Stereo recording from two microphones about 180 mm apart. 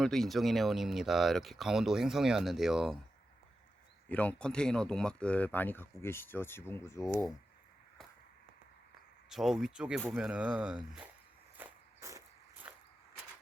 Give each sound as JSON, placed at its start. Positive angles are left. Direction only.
{"t": 0.0, "sound": "speech", "side_deg": 0}
{"t": 4.1, "sound": "speech", "side_deg": 10}
{"t": 9.3, "sound": "speech", "side_deg": 0}
{"t": 11.5, "sound": "walk", "side_deg": -15}
{"t": 12.7, "sound": "a sound", "side_deg": -5}